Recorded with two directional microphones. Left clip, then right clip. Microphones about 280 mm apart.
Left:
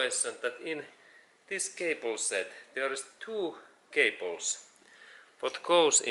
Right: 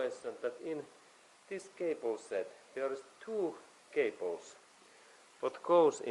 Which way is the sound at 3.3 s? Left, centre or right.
Right.